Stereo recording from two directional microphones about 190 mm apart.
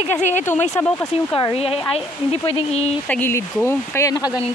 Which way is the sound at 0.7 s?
15° left (ahead or behind).